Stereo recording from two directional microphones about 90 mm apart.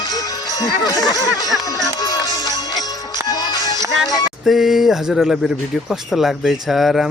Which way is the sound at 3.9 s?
Centre (ahead or behind).